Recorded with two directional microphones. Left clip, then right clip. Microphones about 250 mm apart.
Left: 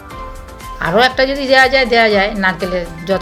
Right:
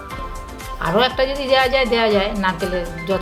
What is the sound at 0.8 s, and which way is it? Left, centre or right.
A woman's voice, centre.